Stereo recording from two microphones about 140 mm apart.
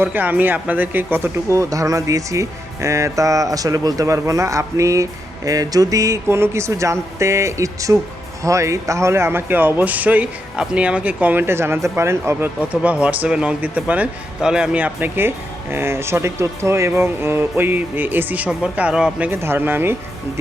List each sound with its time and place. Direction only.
0.0 s speech: 10° right (ahead or behind)